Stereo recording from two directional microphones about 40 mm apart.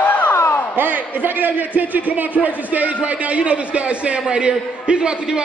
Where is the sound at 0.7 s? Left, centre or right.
Right.